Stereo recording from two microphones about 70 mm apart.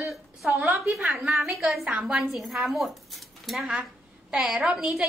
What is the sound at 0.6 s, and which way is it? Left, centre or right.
Speech, right.